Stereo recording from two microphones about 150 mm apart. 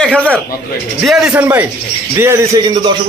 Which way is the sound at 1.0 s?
5° right (ahead or behind).